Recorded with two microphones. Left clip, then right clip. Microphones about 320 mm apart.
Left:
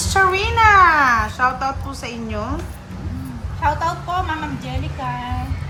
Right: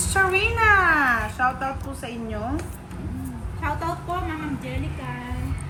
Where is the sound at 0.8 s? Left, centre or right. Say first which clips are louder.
Left 6 dB; centre.